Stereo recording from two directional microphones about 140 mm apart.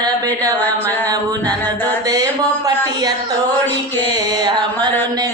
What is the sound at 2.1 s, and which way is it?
Music, 25° right (ahead or behind).